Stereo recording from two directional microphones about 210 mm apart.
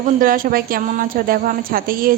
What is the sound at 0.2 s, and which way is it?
Speech, 45° right (ahead or behind).